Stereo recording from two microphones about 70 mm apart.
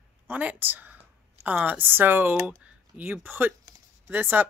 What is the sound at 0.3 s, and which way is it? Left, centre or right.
A woman's voice, right.